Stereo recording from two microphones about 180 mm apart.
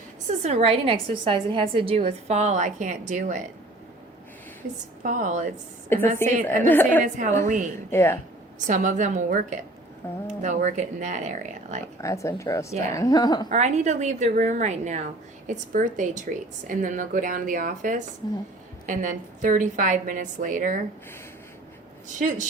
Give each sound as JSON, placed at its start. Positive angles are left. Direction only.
{"t": 0.3, "sound": "a woman's voice", "side_deg": -40}
{"t": 5.0, "sound": "a woman's voice", "side_deg": -45}
{"t": 5.9, "sound": "a woman's voice", "side_deg": 15}
{"t": 7.0, "sound": "a woman's voice", "side_deg": -45}
{"t": 7.9, "sound": "a woman's voice", "side_deg": 15}
{"t": 8.5, "sound": "a woman's voice", "side_deg": -45}
{"t": 10.0, "sound": "a woman's voice", "side_deg": 15}
{"t": 10.4, "sound": "a woman's voice", "side_deg": -45}
{"t": 12.0, "sound": "a woman's voice", "side_deg": 15}
{"t": 13.5, "sound": "a woman's voice", "side_deg": -40}
{"t": 22.2, "sound": "a woman's voice", "side_deg": -45}